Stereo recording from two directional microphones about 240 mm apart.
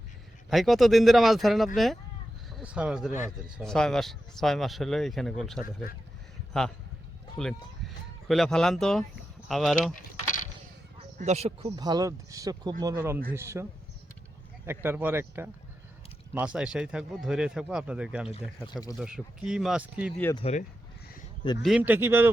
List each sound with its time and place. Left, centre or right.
0.5 s speech: centre
5.6 s speech: left
7.3 s speech: centre
9.9 s keys jangling: left
11.2 s speech: right; by 13.7 s centre
14.7 s speech: centre
18.3 s speech: centre
18.9 s speech: centre
20.3 s speech: left
21.6 s speech: centre